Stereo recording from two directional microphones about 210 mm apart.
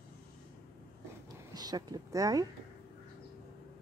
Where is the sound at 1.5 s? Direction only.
20° right (ahead or behind).